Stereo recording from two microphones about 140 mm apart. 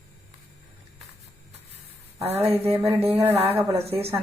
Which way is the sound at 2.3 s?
15° right (ahead or behind).